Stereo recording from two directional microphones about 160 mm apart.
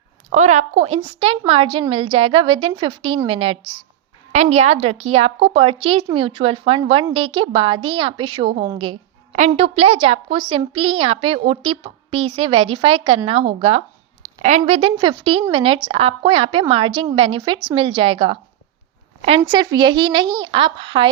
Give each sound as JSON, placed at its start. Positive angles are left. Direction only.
{"t": 0.3, "sound": "a woman's voice", "side_deg": -45}
{"t": 19.5, "sound": "speech", "side_deg": -30}